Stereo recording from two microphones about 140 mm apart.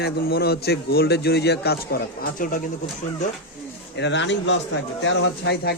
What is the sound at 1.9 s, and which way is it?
Speech, 85° left.